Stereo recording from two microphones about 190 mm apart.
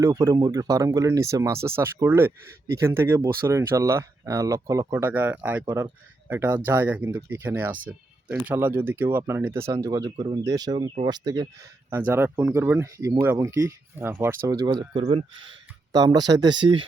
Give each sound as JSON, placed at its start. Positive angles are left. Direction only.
{"t": 0.0, "sound": "speech", "side_deg": -15}